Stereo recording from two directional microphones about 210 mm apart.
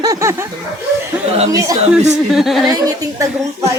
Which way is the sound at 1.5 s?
15° right (ahead or behind).